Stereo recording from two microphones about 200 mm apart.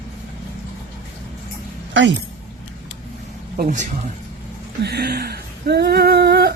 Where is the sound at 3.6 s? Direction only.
40° right (ahead or behind).